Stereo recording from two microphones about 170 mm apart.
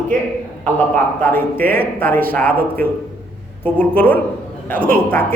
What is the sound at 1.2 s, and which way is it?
A man's voice, 10° left (ahead or behind).